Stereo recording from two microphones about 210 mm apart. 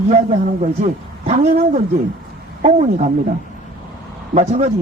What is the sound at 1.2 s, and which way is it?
Speech, 30° right (ahead or behind).